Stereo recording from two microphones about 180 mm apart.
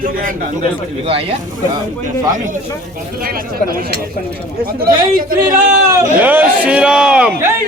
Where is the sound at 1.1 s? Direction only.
30° right (ahead or behind).